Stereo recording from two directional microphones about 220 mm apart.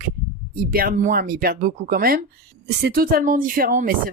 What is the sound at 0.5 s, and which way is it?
Speech, 40° right (ahead or behind).